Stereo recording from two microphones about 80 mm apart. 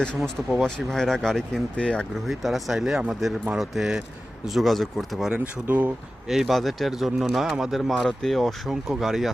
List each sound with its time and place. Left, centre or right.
0.2 s speech: centre
2.2 s speech: centre
5.6 s speech: right
6.2 s speech: centre